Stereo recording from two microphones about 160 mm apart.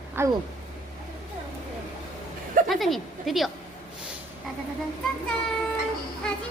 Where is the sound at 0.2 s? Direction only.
15° right (ahead or behind).